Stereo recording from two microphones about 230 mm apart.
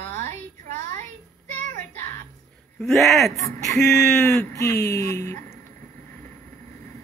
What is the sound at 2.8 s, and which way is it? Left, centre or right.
Speech, centre.